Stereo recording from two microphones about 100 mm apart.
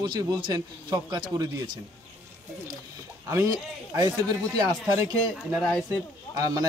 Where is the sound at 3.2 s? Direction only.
30° right (ahead or behind).